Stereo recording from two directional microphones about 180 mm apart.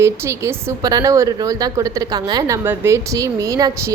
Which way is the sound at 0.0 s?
15° right (ahead or behind).